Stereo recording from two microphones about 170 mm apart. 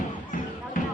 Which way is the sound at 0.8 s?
50° left (ahead or behind).